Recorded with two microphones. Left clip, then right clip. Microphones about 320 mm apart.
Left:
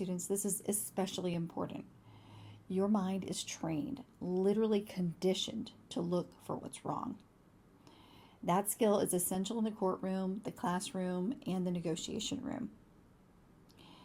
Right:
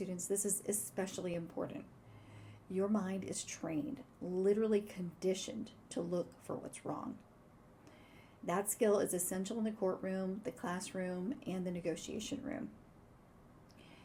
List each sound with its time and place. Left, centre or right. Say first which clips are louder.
0.0 s a woman's voice: left 1 dB; left
2.7 s a woman's voice: left 2 dB; left
8.4 s a woman's voice: left 2 dB; left